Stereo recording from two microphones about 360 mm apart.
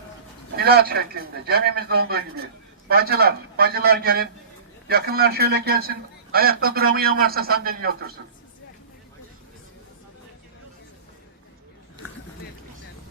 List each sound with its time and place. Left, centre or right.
0.5 s a man's voice: right